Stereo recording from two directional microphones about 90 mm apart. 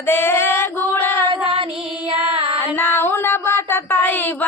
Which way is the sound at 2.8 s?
25° left (ahead or behind).